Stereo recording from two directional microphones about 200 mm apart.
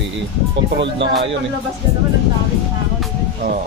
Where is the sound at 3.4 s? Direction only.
45° right (ahead or behind).